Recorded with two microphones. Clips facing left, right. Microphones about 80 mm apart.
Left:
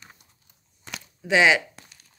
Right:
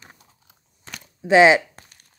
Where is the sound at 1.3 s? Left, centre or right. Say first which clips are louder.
Right 6 dB; right.